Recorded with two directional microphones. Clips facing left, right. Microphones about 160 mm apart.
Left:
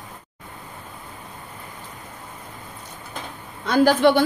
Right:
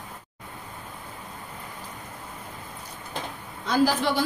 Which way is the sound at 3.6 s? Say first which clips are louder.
Left 7 dB; 65° left (ahead or behind).